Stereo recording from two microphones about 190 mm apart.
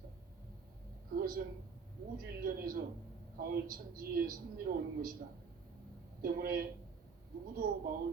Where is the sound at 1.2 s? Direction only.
50° right (ahead or behind).